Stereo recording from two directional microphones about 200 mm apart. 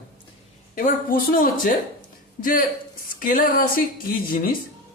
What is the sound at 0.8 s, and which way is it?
Speech, 45° left (ahead or behind).